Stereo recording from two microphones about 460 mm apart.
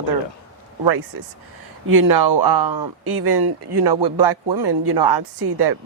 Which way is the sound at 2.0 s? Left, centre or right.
Right.